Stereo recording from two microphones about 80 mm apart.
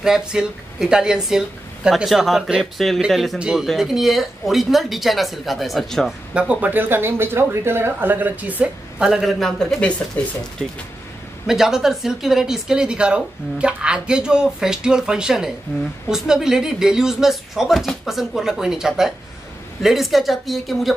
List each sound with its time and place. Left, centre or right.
0.0 s speech: centre
3.3 s speech: centre
6.3 s speech: centre
9.0 s speech: centre
10.2 s speech: left
10.6 s speech: centre
11.4 s speech: centre